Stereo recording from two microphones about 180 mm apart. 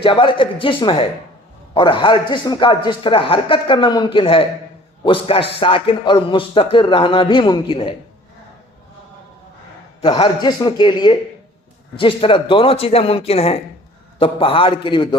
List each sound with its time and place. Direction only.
0.0 s speech: 30° left (ahead or behind)
10.0 s speech: 25° left (ahead or behind)